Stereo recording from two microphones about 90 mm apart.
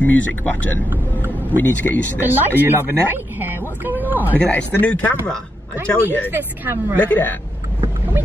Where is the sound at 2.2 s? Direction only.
20° right (ahead or behind).